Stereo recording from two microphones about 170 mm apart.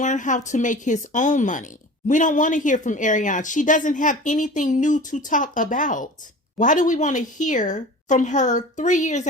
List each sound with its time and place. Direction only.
0.0 s speech: 45° left (ahead or behind)